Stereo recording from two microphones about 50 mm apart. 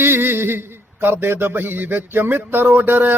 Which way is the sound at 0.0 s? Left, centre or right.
Right.